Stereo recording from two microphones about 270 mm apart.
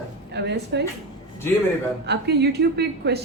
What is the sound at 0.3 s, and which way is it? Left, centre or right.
Speech, right.